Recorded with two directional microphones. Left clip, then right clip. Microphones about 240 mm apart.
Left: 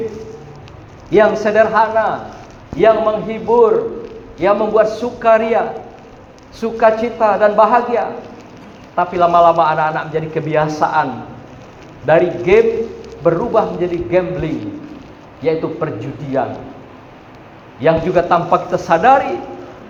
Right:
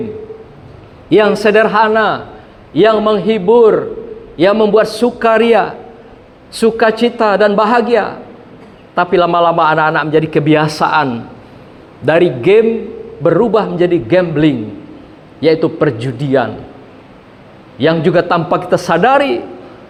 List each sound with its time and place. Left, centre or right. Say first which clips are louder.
1.1 s a man's voice: right 2 dB; right
17.7 s a man's voice: right 2 dB; right